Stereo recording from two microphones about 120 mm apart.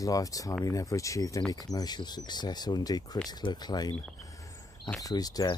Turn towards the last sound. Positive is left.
turn(degrees=30)  # may be behind; listen again after turning